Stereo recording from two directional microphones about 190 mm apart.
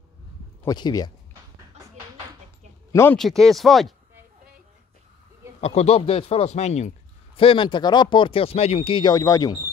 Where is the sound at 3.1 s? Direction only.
Centre (ahead or behind).